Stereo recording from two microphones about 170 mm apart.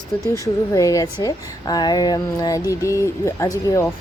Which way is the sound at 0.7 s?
20° left (ahead or behind).